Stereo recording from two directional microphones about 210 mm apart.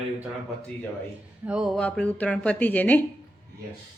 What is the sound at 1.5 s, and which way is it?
A woman's voice, centre (ahead or behind).